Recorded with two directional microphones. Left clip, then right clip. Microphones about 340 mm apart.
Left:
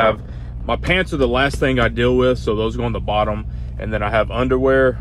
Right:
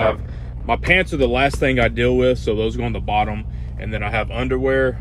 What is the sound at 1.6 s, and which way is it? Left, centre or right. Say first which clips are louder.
Speech: even; centre.